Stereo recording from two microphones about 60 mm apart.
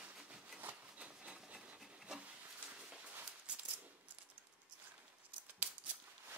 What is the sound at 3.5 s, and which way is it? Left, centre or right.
Coin, centre.